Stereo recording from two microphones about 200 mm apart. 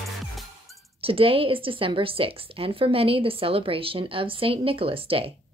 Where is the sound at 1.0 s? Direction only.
30° right (ahead or behind).